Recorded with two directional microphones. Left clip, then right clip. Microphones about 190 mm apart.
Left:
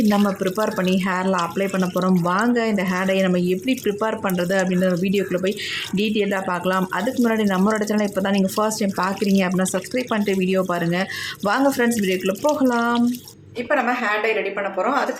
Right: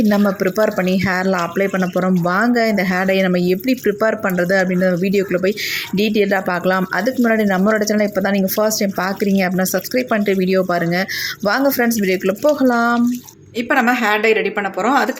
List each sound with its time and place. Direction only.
0.1 s speech: 15° right (ahead or behind)
13.7 s a woman's voice: 55° right (ahead or behind)